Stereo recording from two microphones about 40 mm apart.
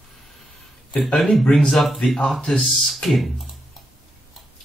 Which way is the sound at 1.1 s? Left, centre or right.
Centre.